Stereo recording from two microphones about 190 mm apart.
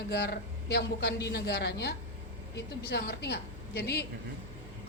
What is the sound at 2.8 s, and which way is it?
A man's voice, 60° left (ahead or behind).